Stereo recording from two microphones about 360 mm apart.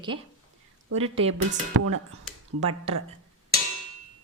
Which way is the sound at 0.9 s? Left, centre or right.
Centre.